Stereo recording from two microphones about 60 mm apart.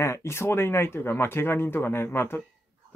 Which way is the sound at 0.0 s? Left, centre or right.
Left.